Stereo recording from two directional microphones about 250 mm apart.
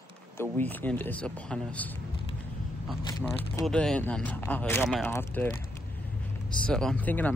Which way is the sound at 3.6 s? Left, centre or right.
Centre.